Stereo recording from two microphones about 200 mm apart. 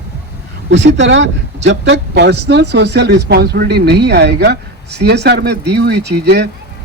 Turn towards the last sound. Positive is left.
turn(degrees=-55)  # may be behind; listen again after turning